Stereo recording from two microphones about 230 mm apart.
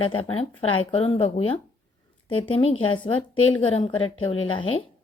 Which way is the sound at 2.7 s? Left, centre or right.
Left.